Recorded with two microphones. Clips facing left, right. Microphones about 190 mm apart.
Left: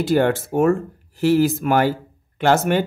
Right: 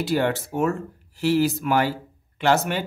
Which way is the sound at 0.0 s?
50° left (ahead or behind).